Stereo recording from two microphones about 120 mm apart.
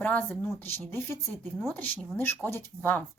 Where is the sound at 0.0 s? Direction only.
15° left (ahead or behind).